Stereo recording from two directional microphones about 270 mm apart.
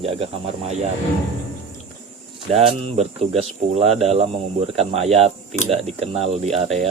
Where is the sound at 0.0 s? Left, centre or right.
Right.